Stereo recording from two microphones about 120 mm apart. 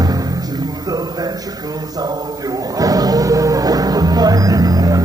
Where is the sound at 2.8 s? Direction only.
30° right (ahead or behind).